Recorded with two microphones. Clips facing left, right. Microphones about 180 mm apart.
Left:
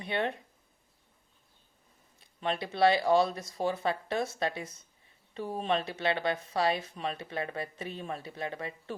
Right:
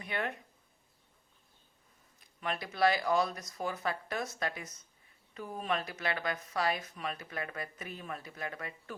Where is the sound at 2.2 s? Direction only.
25° left (ahead or behind).